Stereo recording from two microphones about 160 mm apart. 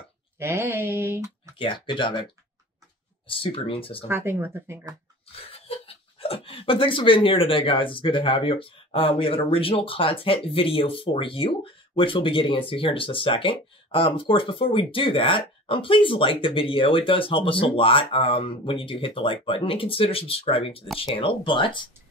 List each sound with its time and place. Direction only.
0.4 s speech: 15° right (ahead or behind)
1.6 s speech: 30° left (ahead or behind)
4.1 s speech: 15° right (ahead or behind)
5.5 s speech: 35° left (ahead or behind)